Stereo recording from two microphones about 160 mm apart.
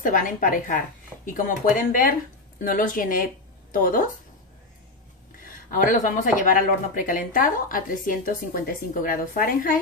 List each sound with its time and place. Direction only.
0.0 s speech: 55° left (ahead or behind)
5.4 s speech: 55° left (ahead or behind)